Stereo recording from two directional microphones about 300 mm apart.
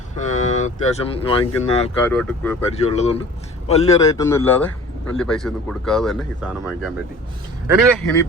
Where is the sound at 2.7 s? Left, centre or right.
Left; by 6.5 s centre.